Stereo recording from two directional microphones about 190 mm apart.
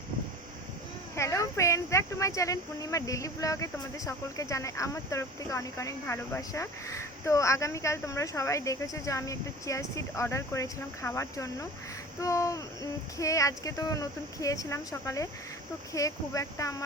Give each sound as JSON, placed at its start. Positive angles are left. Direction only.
{"t": 1.1, "sound": "a woman's voice", "side_deg": 15}